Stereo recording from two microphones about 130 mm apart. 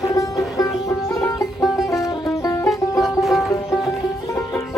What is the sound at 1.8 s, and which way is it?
Music, 25° left (ahead or behind).